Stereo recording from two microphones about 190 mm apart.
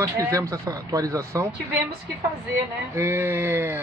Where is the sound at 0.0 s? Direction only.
15° right (ahead or behind).